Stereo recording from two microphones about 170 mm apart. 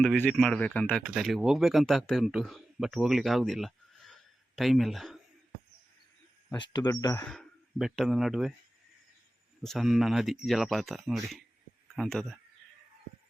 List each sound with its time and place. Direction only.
0.0 s speech: 5° left (ahead or behind)
6.5 s speech: 25° left (ahead or behind)
7.3 s speech: centre (ahead or behind)
9.6 s speech: centre (ahead or behind)